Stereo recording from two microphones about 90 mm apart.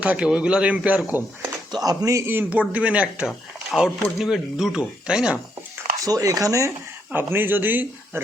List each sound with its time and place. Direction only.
0.0 s speech: 10° right (ahead or behind)
1.7 s speech: 45° right (ahead or behind)
2.3 s speech: 20° right (ahead or behind)
6.1 s speech: 40° right (ahead or behind)
7.1 s speech: 25° right (ahead or behind)